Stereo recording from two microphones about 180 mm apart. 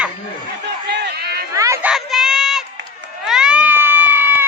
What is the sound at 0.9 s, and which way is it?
Run, 65° right (ahead or behind).